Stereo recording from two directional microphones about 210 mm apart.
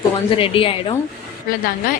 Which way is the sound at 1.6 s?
45° left (ahead or behind).